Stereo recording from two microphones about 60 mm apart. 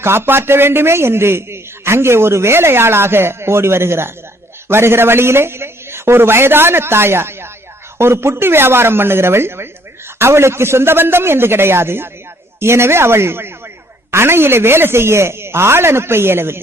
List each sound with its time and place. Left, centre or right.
0.0 s a man's voice: right